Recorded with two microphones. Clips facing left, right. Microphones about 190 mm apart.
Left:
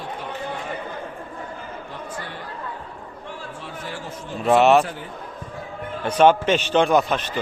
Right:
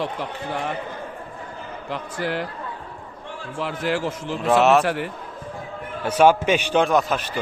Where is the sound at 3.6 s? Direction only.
90° right.